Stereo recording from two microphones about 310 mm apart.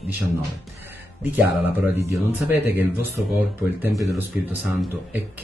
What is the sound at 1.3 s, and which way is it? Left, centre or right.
Speech, centre.